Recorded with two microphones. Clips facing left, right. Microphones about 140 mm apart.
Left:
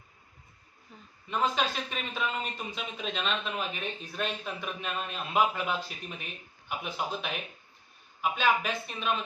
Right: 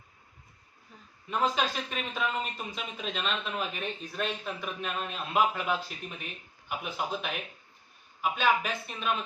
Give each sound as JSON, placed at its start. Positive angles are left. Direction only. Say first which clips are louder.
{"t": 1.3, "sound": "speech", "louder": "even", "side_deg": 0}